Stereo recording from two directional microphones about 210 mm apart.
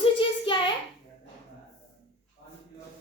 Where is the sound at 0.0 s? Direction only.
25° left (ahead or behind).